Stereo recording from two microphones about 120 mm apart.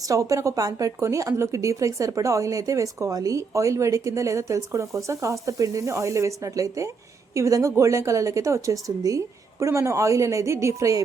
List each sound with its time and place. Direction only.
0.1 s a woman's voice: 25° right (ahead or behind)